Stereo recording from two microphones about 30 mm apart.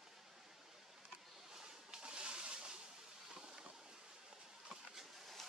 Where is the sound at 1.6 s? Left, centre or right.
Right.